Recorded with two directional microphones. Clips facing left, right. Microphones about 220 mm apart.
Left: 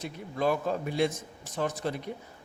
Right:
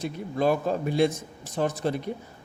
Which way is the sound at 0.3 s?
35° right (ahead or behind).